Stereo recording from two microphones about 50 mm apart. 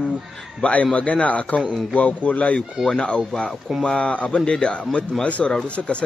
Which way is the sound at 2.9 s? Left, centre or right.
Centre.